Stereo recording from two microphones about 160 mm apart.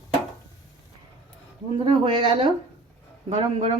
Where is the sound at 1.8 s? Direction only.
30° right (ahead or behind).